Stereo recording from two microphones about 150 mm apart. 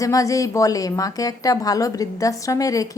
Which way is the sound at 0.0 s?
20° left (ahead or behind).